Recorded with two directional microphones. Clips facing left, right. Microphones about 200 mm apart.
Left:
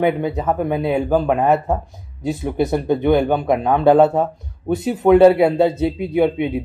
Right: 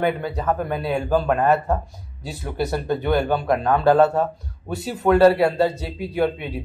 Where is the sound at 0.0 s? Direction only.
20° left (ahead or behind).